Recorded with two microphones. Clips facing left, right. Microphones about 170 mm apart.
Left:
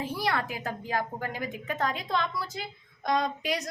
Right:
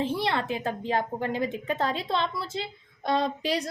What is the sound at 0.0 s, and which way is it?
A woman's voice, 25° right (ahead or behind).